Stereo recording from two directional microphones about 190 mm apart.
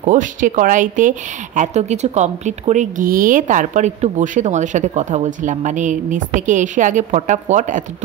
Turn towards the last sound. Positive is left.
turn(degrees=-40)  # may be behind; listen again after turning